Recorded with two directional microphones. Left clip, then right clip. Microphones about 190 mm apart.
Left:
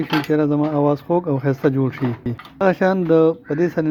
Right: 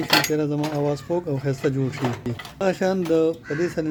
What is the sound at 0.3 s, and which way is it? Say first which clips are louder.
Speech: left 6 dB; 20° left (ahead or behind).